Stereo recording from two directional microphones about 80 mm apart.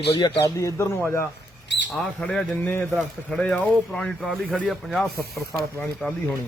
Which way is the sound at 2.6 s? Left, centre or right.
Left.